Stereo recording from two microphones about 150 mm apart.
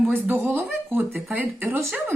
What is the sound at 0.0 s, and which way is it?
Speech, 15° right (ahead or behind).